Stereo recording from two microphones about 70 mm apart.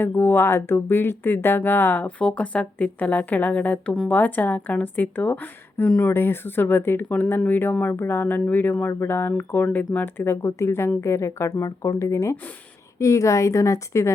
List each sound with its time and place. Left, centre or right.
0.0 s a woman's voice: left